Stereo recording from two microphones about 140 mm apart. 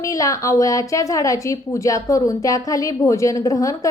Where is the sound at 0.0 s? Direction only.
25° left (ahead or behind).